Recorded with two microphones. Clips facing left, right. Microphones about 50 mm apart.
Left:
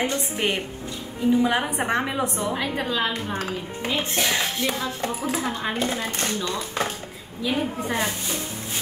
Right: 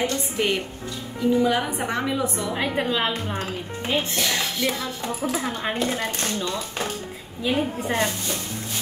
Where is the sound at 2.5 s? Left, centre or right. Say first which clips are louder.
Right 2 dB; right.